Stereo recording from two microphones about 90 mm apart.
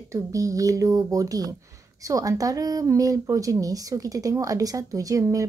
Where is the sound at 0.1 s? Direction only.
35° right (ahead or behind).